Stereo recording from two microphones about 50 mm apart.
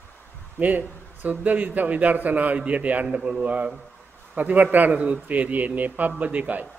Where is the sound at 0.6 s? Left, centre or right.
Right.